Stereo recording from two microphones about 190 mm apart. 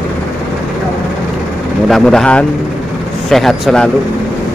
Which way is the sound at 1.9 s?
5° left (ahead or behind).